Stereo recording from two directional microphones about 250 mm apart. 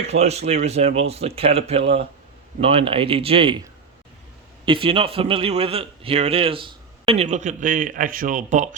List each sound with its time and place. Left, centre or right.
0.1 s a man's voice: right
4.6 s a man's voice: centre